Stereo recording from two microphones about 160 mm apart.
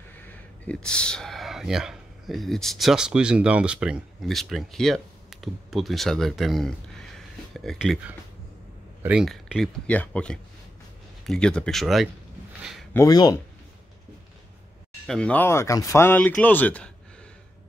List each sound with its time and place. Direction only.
0.2 s speech: 10° left (ahead or behind)
9.0 s speech: 5° right (ahead or behind)
12.9 s speech: 25° left (ahead or behind)
15.0 s speech: 5° left (ahead or behind)